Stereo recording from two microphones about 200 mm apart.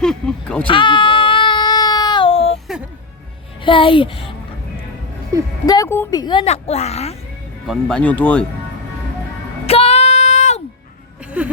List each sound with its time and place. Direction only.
0.0 s speech: 5° left (ahead or behind)
0.7 s baby cry: 25° left (ahead or behind)
3.6 s a woman's voice: 25° left (ahead or behind)
5.6 s a woman's voice: 15° left (ahead or behind)
6.4 s speech: 30° left (ahead or behind)
7.7 s speech: 5° left (ahead or behind)
9.6 s music: 30° left (ahead or behind)
11.3 s a sound: 5° right (ahead or behind)